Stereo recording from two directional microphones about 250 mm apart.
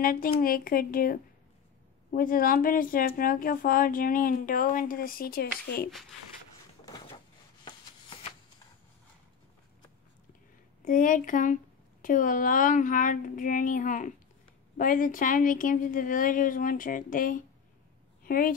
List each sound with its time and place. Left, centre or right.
0.0 s speech: left
7.6 s shuffle: centre
10.9 s speech: left
18.2 s a sound: left